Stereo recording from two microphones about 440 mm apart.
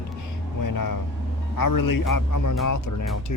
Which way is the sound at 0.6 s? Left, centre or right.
Left.